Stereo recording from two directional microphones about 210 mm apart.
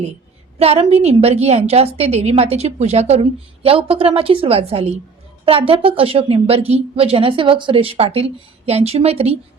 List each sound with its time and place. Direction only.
0.6 s a woman's voice: 30° right (ahead or behind)